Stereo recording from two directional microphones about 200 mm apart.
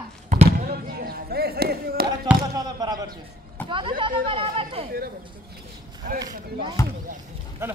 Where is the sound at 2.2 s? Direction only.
15° right (ahead or behind).